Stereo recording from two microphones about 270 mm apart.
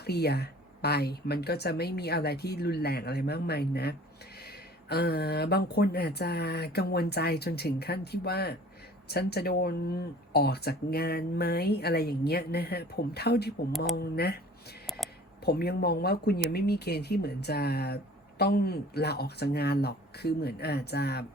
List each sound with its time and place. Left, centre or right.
0.0 s speech: left
14.8 s a sound: centre
15.4 s speech: left